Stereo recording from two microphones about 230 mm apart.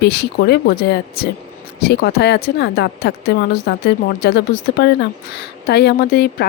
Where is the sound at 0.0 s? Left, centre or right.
Left.